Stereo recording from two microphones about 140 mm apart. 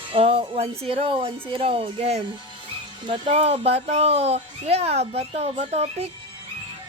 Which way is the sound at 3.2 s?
50° right (ahead or behind).